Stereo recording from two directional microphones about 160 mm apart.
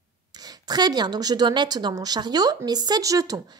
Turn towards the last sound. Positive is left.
turn(degrees=-25)  # may be behind; listen again after turning